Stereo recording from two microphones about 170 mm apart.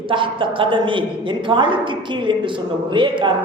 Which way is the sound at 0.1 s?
30° right (ahead or behind).